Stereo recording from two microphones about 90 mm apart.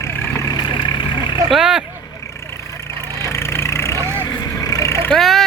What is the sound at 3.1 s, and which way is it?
Vehicle, 30° left (ahead or behind).